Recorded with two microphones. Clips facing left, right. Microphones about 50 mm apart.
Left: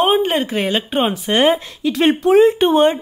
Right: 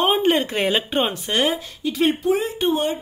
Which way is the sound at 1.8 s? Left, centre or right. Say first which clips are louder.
Left 5 dB; left.